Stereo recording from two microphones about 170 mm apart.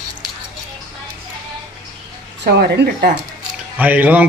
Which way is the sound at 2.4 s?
80° right.